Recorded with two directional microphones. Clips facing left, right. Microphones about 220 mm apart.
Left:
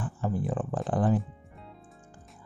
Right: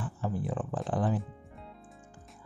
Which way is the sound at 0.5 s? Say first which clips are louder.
Left 3 dB; 45° left (ahead or behind).